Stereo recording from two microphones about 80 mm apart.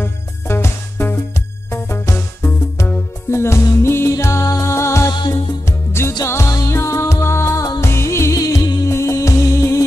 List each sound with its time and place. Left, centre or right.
0.0 s music: left